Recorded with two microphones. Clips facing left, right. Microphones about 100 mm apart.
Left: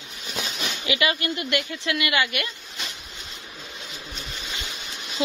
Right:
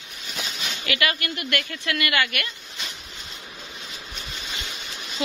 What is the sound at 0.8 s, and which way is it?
Speech, 20° left (ahead or behind).